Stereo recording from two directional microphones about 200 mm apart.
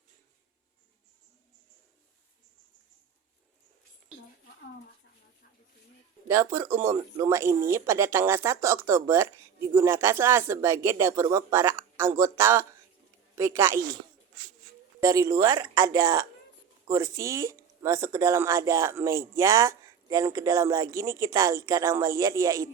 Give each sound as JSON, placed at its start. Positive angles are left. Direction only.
{"t": 6.2, "sound": "speech", "side_deg": -15}
{"t": 15.0, "sound": "speech", "side_deg": -15}